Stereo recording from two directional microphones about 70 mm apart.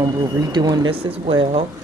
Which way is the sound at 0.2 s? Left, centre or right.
Right.